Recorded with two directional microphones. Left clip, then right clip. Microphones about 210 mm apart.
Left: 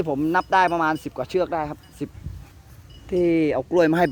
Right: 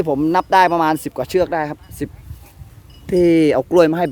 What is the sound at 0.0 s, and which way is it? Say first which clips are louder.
Speech: right 5 dB; 15° right (ahead or behind).